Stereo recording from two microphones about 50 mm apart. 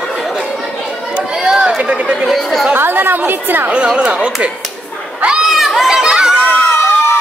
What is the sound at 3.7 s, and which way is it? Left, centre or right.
Speech, centre.